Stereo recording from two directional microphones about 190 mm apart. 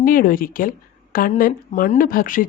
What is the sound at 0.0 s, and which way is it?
A woman's voice, 45° left (ahead or behind).